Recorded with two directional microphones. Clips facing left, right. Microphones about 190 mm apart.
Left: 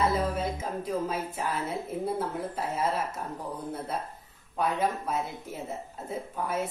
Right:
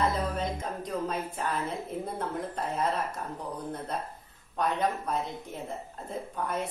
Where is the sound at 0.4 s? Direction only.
5° left (ahead or behind).